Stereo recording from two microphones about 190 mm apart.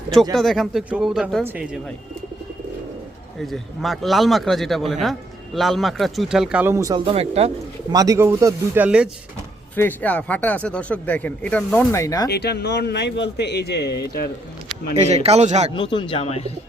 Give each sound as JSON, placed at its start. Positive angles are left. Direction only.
{"t": 0.3, "sound": "a man's voice", "side_deg": 0}
{"t": 3.4, "sound": "a man's voice", "side_deg": 0}
{"t": 7.9, "sound": "speech", "side_deg": -15}
{"t": 9.7, "sound": "speech", "side_deg": 10}
{"t": 12.3, "sound": "a man's voice", "side_deg": 60}
{"t": 15.1, "sound": "a man's voice", "side_deg": -35}
{"t": 15.7, "sound": "speech", "side_deg": 25}